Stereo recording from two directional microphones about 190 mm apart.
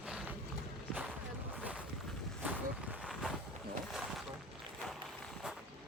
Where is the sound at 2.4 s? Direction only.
5° right (ahead or behind).